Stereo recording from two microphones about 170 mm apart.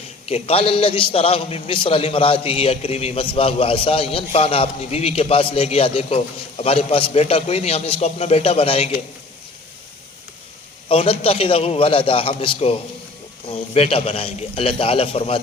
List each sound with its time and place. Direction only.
0.3 s a man's voice: 35° left (ahead or behind)
10.8 s a man's voice: 30° left (ahead or behind)